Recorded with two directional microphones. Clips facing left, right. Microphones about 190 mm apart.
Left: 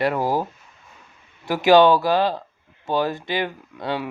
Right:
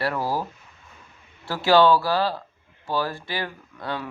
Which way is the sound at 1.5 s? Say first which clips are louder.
Left 3 dB; 15° left (ahead or behind).